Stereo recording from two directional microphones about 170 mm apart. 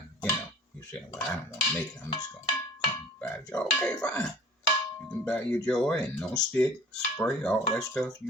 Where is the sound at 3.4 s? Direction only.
15° left (ahead or behind).